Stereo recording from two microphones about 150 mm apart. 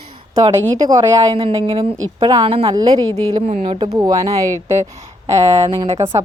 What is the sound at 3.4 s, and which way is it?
Speech, 50° right (ahead or behind).